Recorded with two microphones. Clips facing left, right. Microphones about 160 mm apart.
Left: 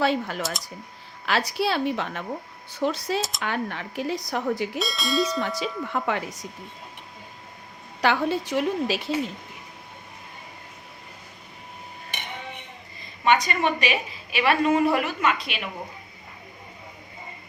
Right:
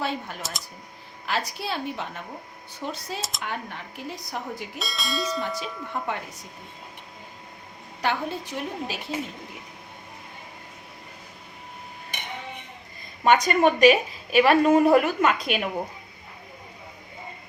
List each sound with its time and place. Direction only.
0.0 s speech: 90° left
3.2 s speech: centre (ahead or behind)
3.4 s speech: 90° left
4.8 s speech: centre (ahead or behind)
5.4 s speech: 90° left
8.0 s speech: 90° left
13.2 s a woman's voice: 45° right (ahead or behind)